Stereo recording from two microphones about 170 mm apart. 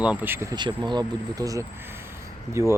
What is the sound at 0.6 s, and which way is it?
Speech, 25° right (ahead or behind).